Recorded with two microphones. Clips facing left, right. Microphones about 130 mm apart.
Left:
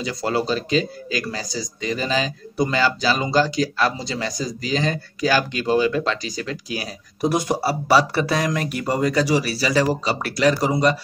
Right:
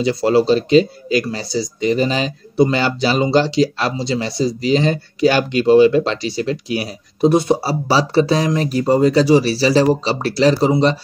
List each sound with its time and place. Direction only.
0.0 s speech: 25° right (ahead or behind)